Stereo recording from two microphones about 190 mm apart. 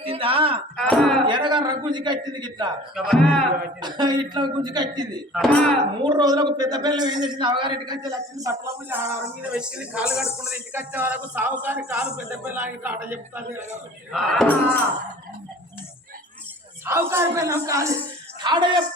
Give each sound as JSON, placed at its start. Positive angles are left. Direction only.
{"t": 0.0, "sound": "a sound", "side_deg": -30}
{"t": 0.8, "sound": "a sound", "side_deg": 5}
{"t": 1.3, "sound": "a man's voice", "side_deg": -25}
{"t": 2.9, "sound": "speech", "side_deg": 0}
{"t": 3.8, "sound": "a man's voice", "side_deg": -25}
{"t": 5.3, "sound": "speech", "side_deg": 5}
{"t": 6.0, "sound": "a man's voice", "side_deg": -25}
{"t": 14.1, "sound": "speech", "side_deg": 5}
{"t": 16.8, "sound": "a man's voice", "side_deg": -10}